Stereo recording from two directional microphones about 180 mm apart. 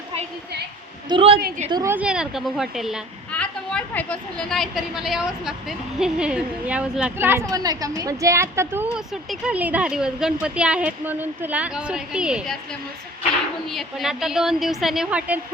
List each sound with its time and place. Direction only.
1.1 s a woman's voice: 30° right (ahead or behind)
1.7 s a woman's voice: 15° right (ahead or behind)
13.7 s a woman's voice: centre (ahead or behind)